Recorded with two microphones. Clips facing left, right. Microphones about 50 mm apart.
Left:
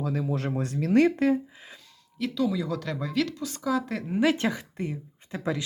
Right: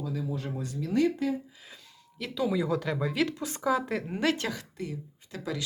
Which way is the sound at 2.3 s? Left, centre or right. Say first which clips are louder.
Right 1 dB; centre.